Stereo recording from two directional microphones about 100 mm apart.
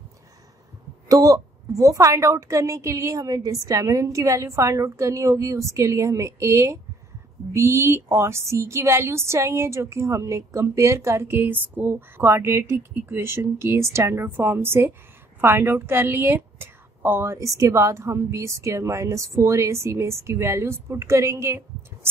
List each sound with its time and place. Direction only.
1.0 s a woman's voice: 35° right (ahead or behind)